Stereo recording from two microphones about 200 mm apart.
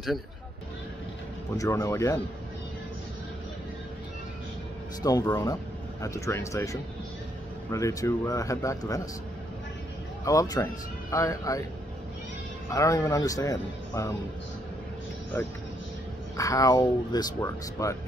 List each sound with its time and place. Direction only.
1.6 s speech: 15° left (ahead or behind)
5.0 s speech: 20° left (ahead or behind)
10.2 s speech: 15° left (ahead or behind)
12.7 s speech: 15° left (ahead or behind)
16.3 s speech: 15° left (ahead or behind)